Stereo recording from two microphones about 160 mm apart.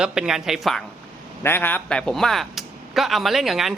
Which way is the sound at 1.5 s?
15° left (ahead or behind).